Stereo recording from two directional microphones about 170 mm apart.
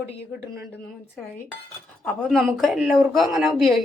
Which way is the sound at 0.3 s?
15° right (ahead or behind).